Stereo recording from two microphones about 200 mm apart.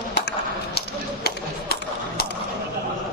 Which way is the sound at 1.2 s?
50° left (ahead or behind).